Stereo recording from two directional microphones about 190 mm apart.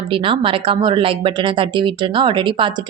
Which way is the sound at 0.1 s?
30° right (ahead or behind).